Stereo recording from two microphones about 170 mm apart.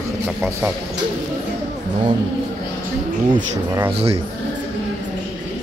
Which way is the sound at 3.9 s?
35° right (ahead or behind).